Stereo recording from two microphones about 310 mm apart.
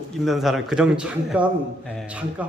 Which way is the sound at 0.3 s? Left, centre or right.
Centre.